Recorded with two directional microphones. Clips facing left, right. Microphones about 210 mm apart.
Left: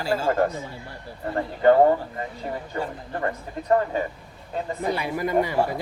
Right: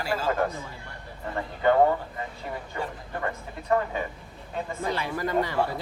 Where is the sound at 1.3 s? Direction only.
40° left (ahead or behind).